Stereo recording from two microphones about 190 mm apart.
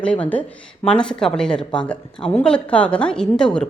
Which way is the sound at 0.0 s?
5° left (ahead or behind).